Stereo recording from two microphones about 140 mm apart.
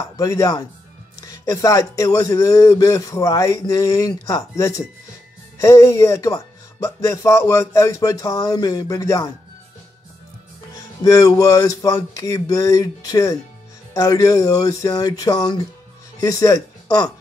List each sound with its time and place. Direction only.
0.0 s speech: 25° left (ahead or behind)
10.7 s speech: 25° left (ahead or behind)